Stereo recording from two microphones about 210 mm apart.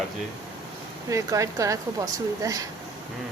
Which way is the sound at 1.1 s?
15° right (ahead or behind).